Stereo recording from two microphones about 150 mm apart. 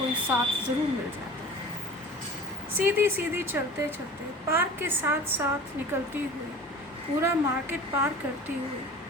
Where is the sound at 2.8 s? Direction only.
15° right (ahead or behind).